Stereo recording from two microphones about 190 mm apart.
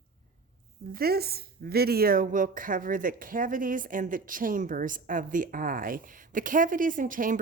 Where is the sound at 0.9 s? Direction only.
55° right (ahead or behind).